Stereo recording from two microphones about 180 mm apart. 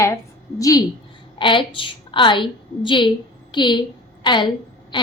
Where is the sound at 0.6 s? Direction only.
20° left (ahead or behind).